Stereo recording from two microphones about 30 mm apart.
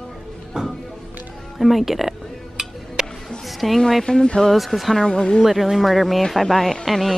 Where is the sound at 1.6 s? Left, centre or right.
Centre.